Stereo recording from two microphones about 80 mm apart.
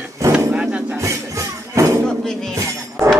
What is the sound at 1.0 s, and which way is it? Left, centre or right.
Music, right.